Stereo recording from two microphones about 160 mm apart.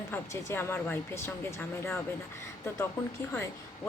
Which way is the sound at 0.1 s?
15° left (ahead or behind).